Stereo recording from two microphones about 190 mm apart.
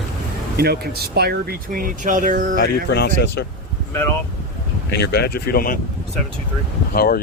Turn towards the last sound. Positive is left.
turn(degrees=50)  # may be behind; listen again after turning